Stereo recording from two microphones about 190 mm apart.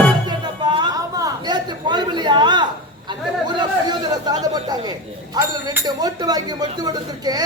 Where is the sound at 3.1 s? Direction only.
25° right (ahead or behind).